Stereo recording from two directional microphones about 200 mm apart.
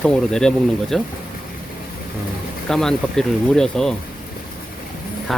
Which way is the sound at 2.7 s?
Centre (ahead or behind).